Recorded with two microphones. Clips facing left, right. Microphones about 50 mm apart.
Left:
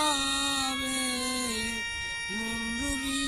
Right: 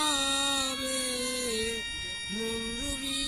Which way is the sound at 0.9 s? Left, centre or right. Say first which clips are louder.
Left 2 dB; centre.